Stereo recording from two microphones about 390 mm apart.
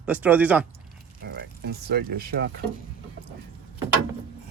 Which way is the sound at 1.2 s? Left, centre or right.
Right.